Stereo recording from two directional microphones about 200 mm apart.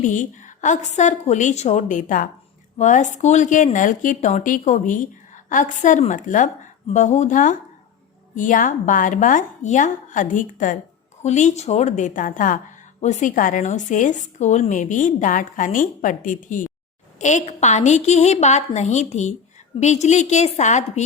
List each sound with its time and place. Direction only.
0.0 s a woman's voice: 40° left (ahead or behind)